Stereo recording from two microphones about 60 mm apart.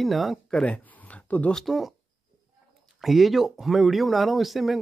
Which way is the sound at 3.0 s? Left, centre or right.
Centre.